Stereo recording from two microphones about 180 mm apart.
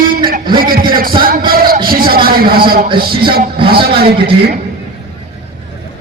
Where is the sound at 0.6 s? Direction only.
55° right (ahead or behind).